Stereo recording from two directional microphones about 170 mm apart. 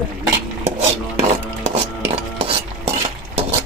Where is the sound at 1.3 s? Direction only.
35° right (ahead or behind).